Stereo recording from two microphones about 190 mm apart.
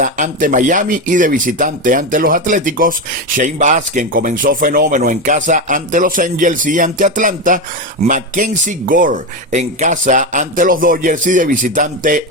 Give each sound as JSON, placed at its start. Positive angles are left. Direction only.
{"t": 0.0, "sound": "speech", "side_deg": -45}